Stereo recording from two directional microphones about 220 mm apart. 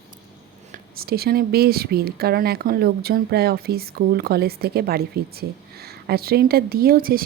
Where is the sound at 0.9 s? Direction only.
45° right (ahead or behind).